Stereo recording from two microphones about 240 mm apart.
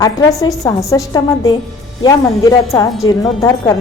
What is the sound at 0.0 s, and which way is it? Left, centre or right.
A woman's voice, centre.